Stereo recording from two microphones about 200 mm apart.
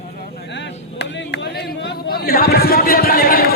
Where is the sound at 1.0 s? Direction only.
60° left (ahead or behind).